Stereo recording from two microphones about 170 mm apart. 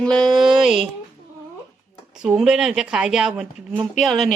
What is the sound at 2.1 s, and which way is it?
Speech, 5° right (ahead or behind).